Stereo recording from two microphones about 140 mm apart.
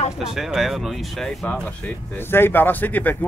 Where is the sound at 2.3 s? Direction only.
15° left (ahead or behind).